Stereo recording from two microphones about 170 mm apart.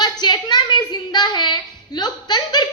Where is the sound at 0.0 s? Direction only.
25° left (ahead or behind).